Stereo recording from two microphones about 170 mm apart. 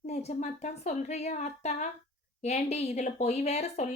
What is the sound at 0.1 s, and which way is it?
Speech, 40° left (ahead or behind).